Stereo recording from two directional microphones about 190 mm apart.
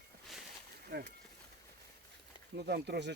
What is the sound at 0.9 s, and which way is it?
Speech, 60° right (ahead or behind).